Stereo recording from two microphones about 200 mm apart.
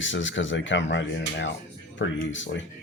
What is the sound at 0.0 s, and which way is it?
Speech, 70° left (ahead or behind).